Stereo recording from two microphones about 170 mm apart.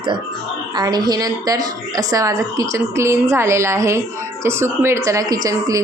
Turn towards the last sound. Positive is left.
turn(degrees=-20)  # may be behind; listen again after turning